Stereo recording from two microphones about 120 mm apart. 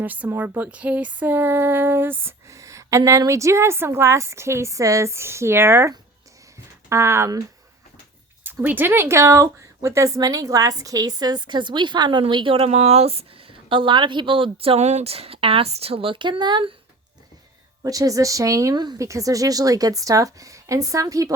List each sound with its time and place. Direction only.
0.0 s speech: 15° right (ahead or behind)
6.9 s speech: 20° right (ahead or behind)
8.4 s a woman's voice: 15° right (ahead or behind); by 16.7 s 40° right (ahead or behind)
17.8 s speech: 30° right (ahead or behind)